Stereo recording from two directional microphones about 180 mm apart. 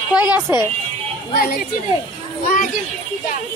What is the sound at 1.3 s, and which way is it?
Speech, 55° left (ahead or behind).